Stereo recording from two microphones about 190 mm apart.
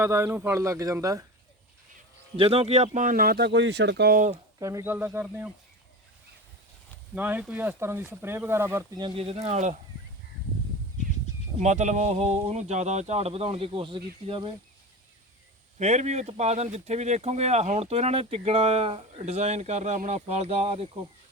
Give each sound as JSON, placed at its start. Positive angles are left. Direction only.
{"t": 0.0, "sound": "speech", "side_deg": -10}
{"t": 2.3, "sound": "speech", "side_deg": -30}
{"t": 4.6, "sound": "speech", "side_deg": -15}
{"t": 7.2, "sound": "speech", "side_deg": -10}
{"t": 9.0, "sound": "speech", "side_deg": -30}
{"t": 11.6, "sound": "speech", "side_deg": -40}
{"t": 15.8, "sound": "speech", "side_deg": -35}